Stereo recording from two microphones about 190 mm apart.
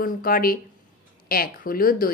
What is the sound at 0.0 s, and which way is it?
Speech, 50° left (ahead or behind).